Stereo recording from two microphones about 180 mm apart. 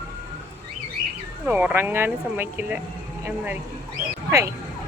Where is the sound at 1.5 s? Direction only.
10° right (ahead or behind).